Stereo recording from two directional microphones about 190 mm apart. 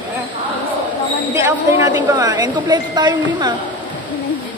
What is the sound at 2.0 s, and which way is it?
Speech, 15° right (ahead or behind).